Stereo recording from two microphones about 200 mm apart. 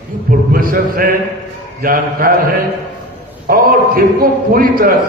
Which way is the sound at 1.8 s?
45° right (ahead or behind).